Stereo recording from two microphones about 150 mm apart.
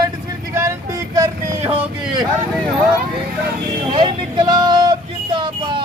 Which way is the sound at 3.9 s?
30° right (ahead or behind).